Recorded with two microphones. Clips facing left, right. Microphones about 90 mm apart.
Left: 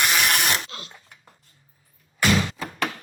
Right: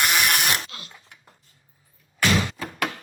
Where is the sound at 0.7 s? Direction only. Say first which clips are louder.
Left 3 dB; 30° left (ahead or behind).